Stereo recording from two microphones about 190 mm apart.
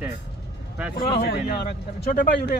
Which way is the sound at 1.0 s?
50° left (ahead or behind).